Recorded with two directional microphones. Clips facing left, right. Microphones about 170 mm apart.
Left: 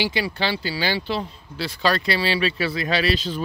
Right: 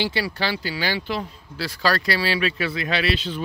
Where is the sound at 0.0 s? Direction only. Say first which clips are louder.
Left 1 dB; 20° left (ahead or behind).